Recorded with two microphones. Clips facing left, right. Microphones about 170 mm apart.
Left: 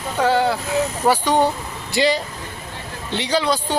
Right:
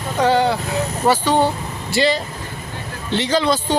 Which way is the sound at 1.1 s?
15° left (ahead or behind).